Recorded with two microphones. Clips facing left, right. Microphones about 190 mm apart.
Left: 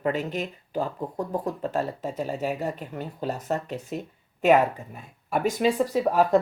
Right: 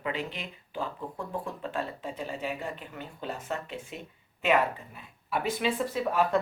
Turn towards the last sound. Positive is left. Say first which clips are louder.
# left 6 dB
turn(degrees=40)  # may be behind; listen again after turning